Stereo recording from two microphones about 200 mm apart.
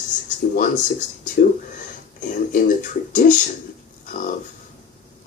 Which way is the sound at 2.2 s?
40° left (ahead or behind).